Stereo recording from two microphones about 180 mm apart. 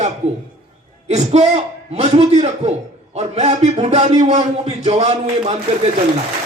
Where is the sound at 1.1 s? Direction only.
40° right (ahead or behind).